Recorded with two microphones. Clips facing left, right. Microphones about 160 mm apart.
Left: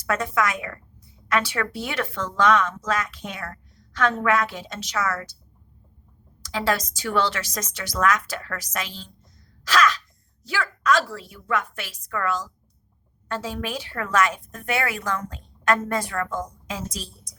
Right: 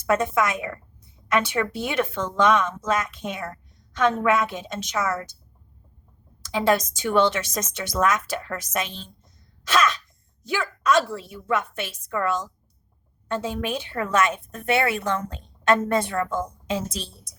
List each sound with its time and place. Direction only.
0.1 s a woman's voice: 25° right (ahead or behind)
6.4 s a woman's voice: 20° right (ahead or behind)